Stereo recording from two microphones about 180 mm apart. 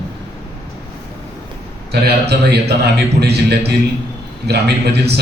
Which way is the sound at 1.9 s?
65° right (ahead or behind).